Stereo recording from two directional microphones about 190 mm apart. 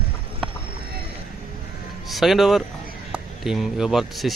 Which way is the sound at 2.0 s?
Centre (ahead or behind).